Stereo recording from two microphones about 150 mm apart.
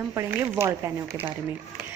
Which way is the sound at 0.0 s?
20° right (ahead or behind).